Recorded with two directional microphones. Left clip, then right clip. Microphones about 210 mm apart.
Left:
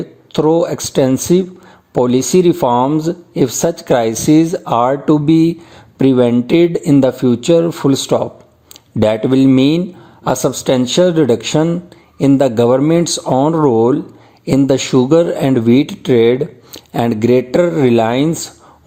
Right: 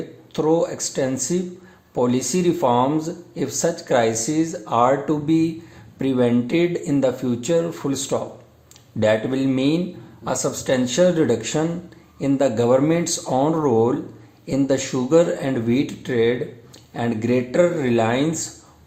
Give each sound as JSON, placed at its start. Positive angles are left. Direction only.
{"t": 0.3, "sound": "speech", "side_deg": 40}